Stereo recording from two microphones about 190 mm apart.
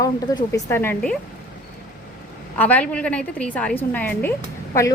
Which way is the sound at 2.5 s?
10° left (ahead or behind).